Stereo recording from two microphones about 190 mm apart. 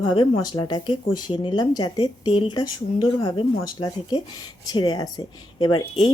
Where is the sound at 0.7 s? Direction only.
25° left (ahead or behind).